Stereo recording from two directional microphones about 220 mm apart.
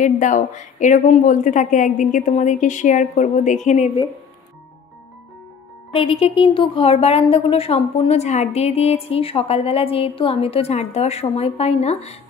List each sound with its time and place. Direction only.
0.0 s a woman's voice: 35° left (ahead or behind)
5.9 s speech: 25° left (ahead or behind)